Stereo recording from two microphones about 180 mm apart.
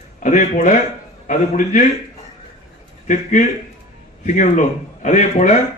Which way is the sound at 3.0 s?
45° left (ahead or behind).